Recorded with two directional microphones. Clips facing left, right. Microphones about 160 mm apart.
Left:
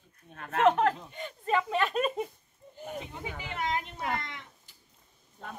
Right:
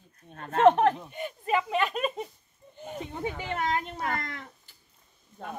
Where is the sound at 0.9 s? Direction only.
15° right (ahead or behind).